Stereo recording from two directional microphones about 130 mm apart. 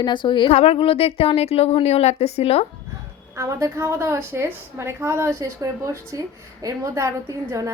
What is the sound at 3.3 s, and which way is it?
A woman's voice, 20° right (ahead or behind).